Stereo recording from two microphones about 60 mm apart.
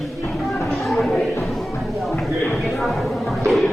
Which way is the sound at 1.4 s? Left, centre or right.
Centre.